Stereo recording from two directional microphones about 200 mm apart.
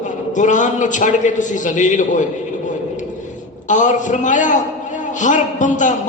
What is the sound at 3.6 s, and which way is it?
A man's voice, 40° left (ahead or behind).